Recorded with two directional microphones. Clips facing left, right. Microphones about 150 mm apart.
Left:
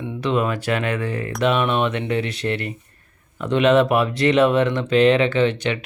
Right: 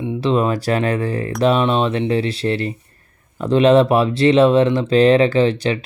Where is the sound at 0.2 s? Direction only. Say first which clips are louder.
Right 3 dB; 30° right (ahead or behind).